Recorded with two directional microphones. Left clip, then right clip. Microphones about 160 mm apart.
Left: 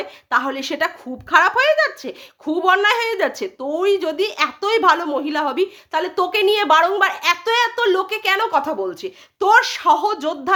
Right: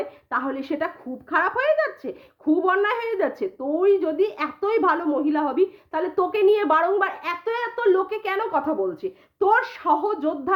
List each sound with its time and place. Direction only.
0.0 s a woman's voice: 15° left (ahead or behind)